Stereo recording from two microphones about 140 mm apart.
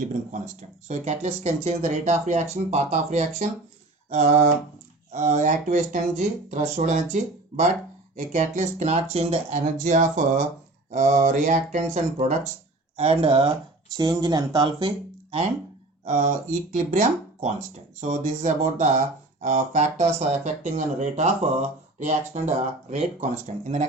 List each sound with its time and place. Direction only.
0.1 s speech: 65° right (ahead or behind)
0.9 s speech: 50° right (ahead or behind)
13.0 s speech: 40° right (ahead or behind)
13.9 s speech: 30° right (ahead or behind)
16.0 s speech: 55° right (ahead or behind)